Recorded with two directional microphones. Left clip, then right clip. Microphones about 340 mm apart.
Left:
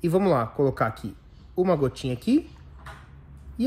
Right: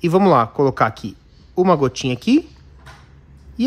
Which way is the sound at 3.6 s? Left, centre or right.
Centre.